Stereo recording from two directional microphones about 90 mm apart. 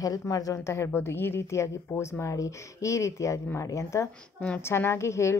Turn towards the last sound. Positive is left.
turn(degrees=30)  # may be behind; listen again after turning